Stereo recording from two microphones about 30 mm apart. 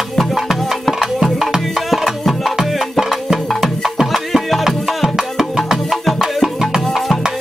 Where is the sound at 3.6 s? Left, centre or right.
Centre.